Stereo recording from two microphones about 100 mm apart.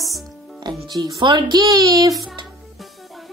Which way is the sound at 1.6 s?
35° right (ahead or behind).